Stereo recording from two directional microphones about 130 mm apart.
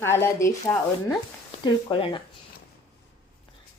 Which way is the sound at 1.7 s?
40° left (ahead or behind).